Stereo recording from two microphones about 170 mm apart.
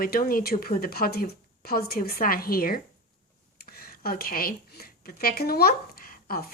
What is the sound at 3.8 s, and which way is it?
A woman's voice, 60° left (ahead or behind).